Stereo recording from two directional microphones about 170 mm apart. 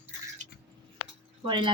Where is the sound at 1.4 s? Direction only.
25° right (ahead or behind).